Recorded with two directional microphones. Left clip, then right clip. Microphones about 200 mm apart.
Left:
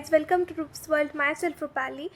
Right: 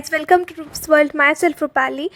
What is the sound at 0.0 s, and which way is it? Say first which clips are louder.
A woman's voice: right 7 dB; 50° right (ahead or behind).